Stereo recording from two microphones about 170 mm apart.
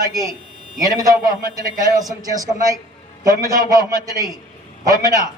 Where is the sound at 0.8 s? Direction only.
20° right (ahead or behind).